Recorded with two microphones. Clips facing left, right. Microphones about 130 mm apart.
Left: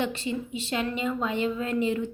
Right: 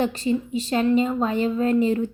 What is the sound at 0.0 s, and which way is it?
A woman's voice, 40° right (ahead or behind).